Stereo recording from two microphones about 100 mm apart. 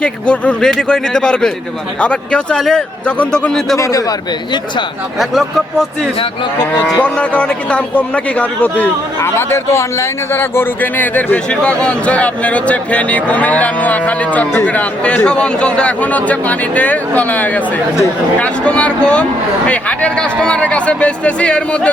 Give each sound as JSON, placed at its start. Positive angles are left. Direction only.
{"t": 0.0, "sound": "a man's voice", "side_deg": 10}
{"t": 3.8, "sound": "a man's voice", "side_deg": 30}
{"t": 5.2, "sound": "speech", "side_deg": 0}
{"t": 6.8, "sound": "a man's voice", "side_deg": 10}
{"t": 9.2, "sound": "a man's voice", "side_deg": 25}